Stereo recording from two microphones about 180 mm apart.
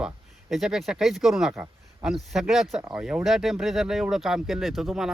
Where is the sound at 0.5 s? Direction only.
Centre (ahead or behind).